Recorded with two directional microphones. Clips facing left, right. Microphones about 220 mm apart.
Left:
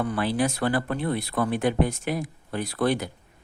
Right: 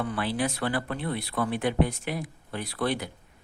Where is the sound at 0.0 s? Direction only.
45° left (ahead or behind).